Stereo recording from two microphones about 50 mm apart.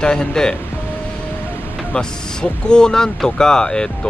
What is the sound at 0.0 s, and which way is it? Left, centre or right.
Speech, centre.